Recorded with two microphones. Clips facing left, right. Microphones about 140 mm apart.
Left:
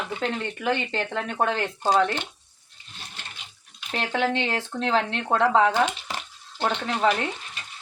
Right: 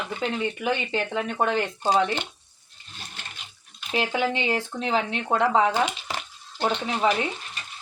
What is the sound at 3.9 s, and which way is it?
Speech, 5° right (ahead or behind).